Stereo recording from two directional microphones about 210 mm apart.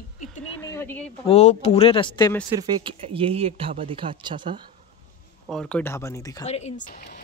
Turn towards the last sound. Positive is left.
turn(degrees=45)  # may be behind; listen again after turning